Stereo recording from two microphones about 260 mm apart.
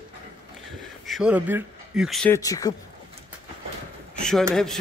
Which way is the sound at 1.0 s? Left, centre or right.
Centre.